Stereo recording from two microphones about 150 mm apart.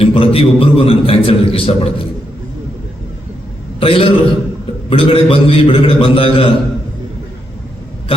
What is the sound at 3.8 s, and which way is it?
A man's voice, 40° left (ahead or behind).